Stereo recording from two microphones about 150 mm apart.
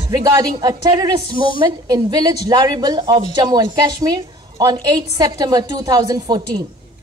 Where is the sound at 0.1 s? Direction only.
25° right (ahead or behind).